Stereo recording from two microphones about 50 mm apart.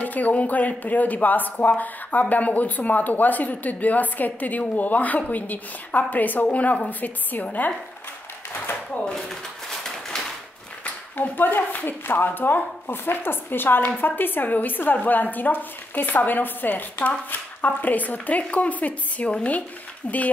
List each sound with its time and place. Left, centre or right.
0.0 s speech: left
9.0 s speech: centre
10.8 s speech: left